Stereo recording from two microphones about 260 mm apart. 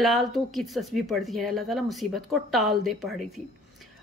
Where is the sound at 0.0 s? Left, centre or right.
Centre.